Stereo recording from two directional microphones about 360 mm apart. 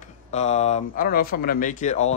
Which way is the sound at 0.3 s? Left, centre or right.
Centre.